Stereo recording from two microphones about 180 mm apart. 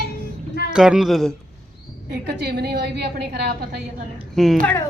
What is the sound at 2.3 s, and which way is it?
A woman's voice, 65° right (ahead or behind).